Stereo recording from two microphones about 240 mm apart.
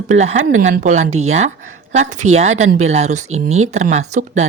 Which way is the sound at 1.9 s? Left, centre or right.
Right.